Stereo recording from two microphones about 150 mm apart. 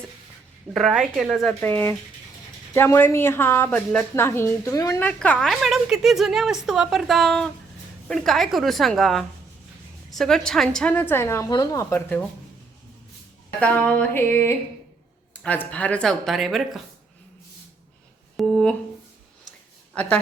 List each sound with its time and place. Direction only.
0.7 s a woman's voice: centre (ahead or behind)
1.6 s a woman's voice: 15° left (ahead or behind)
4.9 s a woman's voice: 10° left (ahead or behind)
13.6 s a woman's voice: 10° left (ahead or behind)
18.3 s a sound: 5° left (ahead or behind)
19.9 s speech: 5° left (ahead or behind)